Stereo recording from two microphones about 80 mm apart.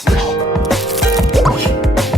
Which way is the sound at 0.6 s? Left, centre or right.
Centre.